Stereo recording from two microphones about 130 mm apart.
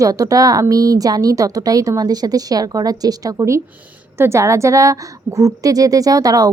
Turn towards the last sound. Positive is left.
turn(degrees=-30)  # may be behind; listen again after turning